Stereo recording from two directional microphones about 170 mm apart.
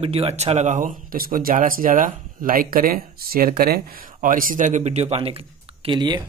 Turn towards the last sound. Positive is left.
turn(degrees=-25)  # may be behind; listen again after turning